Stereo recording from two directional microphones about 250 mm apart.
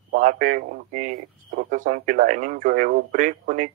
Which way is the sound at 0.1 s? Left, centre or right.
Right.